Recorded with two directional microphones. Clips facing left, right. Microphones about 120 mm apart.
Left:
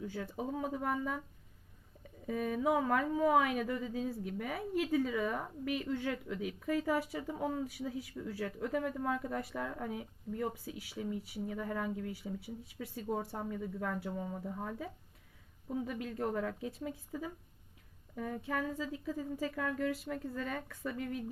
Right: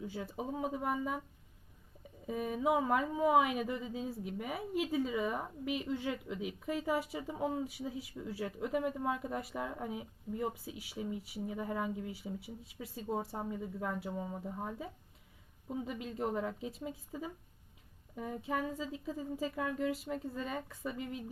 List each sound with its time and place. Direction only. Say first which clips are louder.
0.0 s speech: left 1 dB; 15° right (ahead or behind)
2.2 s speech: left 1 dB; 15° right (ahead or behind)